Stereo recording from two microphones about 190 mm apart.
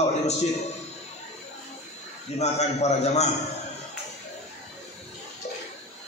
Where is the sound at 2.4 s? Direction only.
35° left (ahead or behind).